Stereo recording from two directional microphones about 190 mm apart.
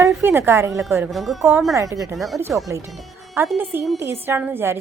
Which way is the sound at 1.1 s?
Centre (ahead or behind).